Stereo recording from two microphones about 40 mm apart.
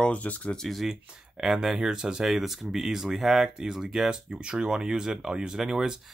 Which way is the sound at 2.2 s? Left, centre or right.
Centre.